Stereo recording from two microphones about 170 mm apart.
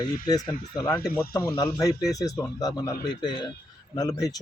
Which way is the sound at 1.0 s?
10° left (ahead or behind).